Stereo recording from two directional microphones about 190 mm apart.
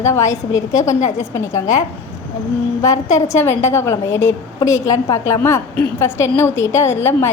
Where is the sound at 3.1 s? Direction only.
15° left (ahead or behind).